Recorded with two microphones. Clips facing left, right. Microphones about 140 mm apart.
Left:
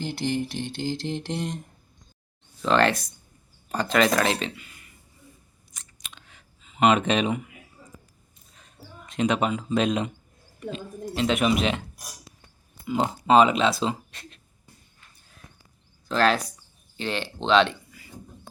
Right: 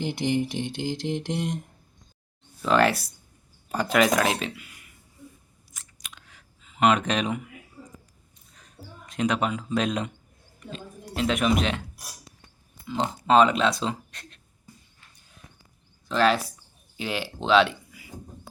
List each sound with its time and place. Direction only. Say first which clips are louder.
0.0 s mantra: right 2 dB; 20° right (ahead or behind)
2.6 s mantra: even; 5° right (ahead or behind)
3.7 s speech: even; 10° right (ahead or behind)
5.7 s a sound: even; 5° right (ahead or behind)
8.5 s speech: even; centre (ahead or behind)
12.8 s speech: left 3 dB; 5° left (ahead or behind)
16.0 s speech: even; centre (ahead or behind)